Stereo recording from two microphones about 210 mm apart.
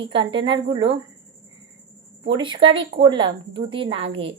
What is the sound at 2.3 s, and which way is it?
A woman's voice, 25° right (ahead or behind).